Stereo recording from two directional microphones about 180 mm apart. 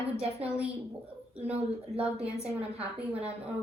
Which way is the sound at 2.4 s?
35° right (ahead or behind).